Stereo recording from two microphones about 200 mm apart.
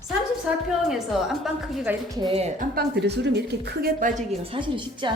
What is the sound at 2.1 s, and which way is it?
Speech, 25° right (ahead or behind).